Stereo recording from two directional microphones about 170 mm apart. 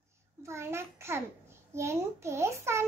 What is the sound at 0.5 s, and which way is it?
A child's voice, 15° right (ahead or behind).